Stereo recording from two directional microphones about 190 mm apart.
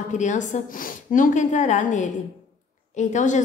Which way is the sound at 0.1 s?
40° left (ahead or behind).